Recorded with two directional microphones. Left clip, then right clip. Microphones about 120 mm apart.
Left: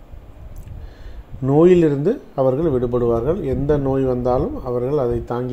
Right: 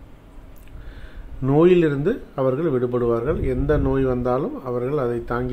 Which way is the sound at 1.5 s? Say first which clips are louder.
Left 3 dB; 20° left (ahead or behind).